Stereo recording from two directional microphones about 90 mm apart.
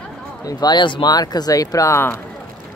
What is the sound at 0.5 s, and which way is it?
Speech, 50° left (ahead or behind).